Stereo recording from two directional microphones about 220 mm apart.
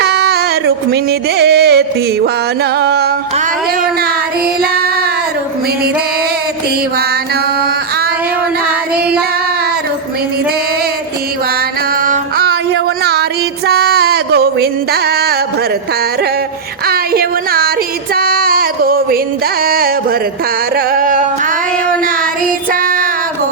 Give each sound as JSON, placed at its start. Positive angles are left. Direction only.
{"t": 0.0, "sound": "a sound", "side_deg": -50}
{"t": 1.4, "sound": "music", "side_deg": -45}
{"t": 2.7, "sound": "carnatic music", "side_deg": -45}
{"t": 12.0, "sound": "music", "side_deg": -40}
{"t": 16.8, "sound": "a sound", "side_deg": -45}
{"t": 18.1, "sound": "female singing", "side_deg": -40}
{"t": 19.6, "sound": "music", "side_deg": -40}
{"t": 22.7, "sound": "music", "side_deg": -40}